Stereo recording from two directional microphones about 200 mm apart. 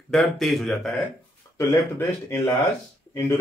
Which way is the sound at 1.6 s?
15° left (ahead or behind).